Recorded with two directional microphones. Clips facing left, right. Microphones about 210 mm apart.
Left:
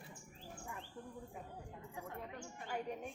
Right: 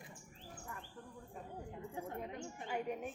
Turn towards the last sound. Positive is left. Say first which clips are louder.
# right 3 dB
turn(degrees=-5)  # may be behind; listen again after turning